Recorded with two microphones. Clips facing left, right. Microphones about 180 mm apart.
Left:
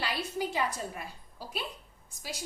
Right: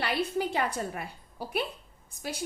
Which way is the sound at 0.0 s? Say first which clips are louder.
Right 4 dB; 60° right (ahead or behind).